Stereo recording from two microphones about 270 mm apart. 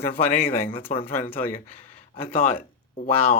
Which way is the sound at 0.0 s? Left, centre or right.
Left.